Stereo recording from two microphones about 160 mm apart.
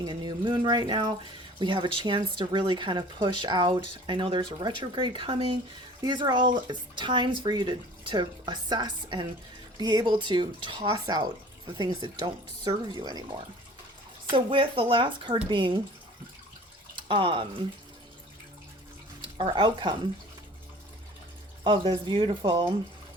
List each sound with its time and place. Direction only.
0.0 s a sound: 30° right (ahead or behind)
1.5 s speech: 30° right (ahead or behind)
14.3 s speech: 30° right (ahead or behind)
17.1 s speech: 30° right (ahead or behind)
19.2 s speech: 35° right (ahead or behind)
21.6 s speech: 30° right (ahead or behind)